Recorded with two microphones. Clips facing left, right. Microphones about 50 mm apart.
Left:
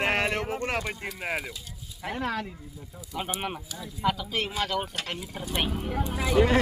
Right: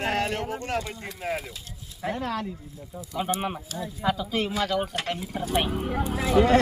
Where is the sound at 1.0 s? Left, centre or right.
Left.